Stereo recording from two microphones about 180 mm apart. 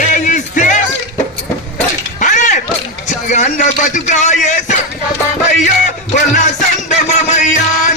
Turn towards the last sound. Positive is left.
turn(degrees=40)  # may be behind; listen again after turning